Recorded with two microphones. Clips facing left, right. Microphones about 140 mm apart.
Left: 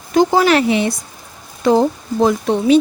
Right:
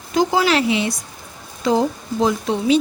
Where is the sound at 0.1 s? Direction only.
55° left (ahead or behind).